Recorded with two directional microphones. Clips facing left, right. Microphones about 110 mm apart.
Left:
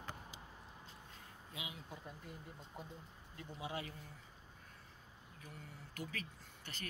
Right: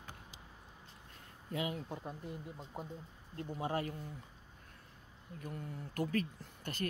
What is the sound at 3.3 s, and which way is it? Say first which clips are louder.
Speech: right 8 dB; 45° right (ahead or behind).